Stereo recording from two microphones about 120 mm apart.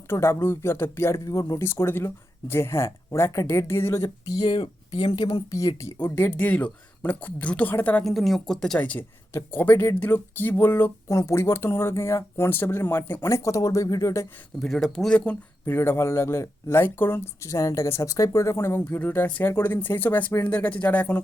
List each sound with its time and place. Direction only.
0.1 s speech: 20° left (ahead or behind)
4.9 s speech: 50° left (ahead or behind)
5.5 s speech: 25° left (ahead or behind)
8.0 s speech: centre (ahead or behind)
8.8 s speech: 15° left (ahead or behind)
14.6 s speech: 5° left (ahead or behind)